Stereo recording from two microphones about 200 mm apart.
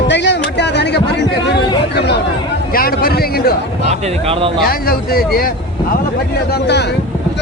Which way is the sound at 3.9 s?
30° right (ahead or behind).